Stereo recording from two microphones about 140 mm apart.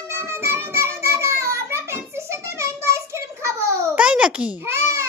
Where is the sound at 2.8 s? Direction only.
20° right (ahead or behind).